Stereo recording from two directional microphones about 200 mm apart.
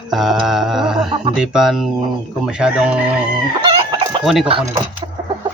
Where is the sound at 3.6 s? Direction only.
25° right (ahead or behind).